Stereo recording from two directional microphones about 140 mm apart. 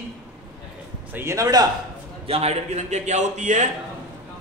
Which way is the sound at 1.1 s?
20° right (ahead or behind).